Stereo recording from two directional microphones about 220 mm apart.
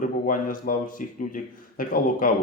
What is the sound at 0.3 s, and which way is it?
Speech, 40° left (ahead or behind).